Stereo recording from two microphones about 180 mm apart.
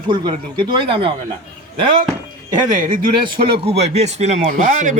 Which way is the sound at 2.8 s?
50° right (ahead or behind).